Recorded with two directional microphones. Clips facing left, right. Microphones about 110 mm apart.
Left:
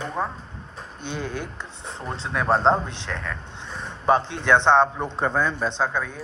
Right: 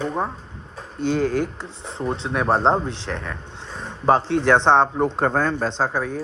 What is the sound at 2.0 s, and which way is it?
A man's voice, 25° right (ahead or behind).